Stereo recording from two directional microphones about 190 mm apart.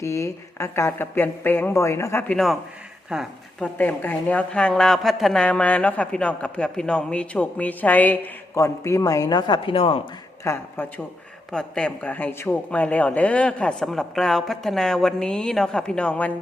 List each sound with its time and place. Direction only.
0.0 s speech: 15° left (ahead or behind); by 3.7 s centre (ahead or behind)
3.8 s speech: 10° left (ahead or behind); by 10.0 s 30° left (ahead or behind)
10.4 s speech: 10° left (ahead or behind)